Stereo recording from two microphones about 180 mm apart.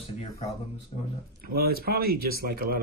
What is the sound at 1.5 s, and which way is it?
Speech, 60° right (ahead or behind).